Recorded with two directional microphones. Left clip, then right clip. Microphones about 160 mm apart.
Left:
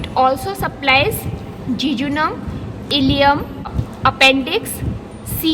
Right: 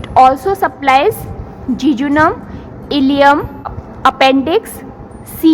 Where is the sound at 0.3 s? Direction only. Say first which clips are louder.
Right 7 dB; 45° right (ahead or behind).